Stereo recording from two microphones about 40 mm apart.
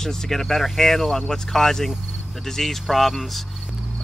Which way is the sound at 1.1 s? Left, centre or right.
Centre.